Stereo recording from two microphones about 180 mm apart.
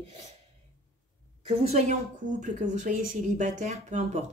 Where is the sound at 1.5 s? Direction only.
35° right (ahead or behind).